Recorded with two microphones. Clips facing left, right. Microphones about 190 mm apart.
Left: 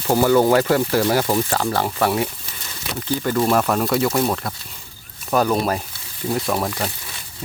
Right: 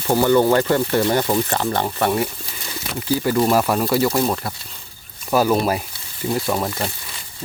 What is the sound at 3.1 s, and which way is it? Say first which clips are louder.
Speech: right 2 dB; 10° right (ahead or behind).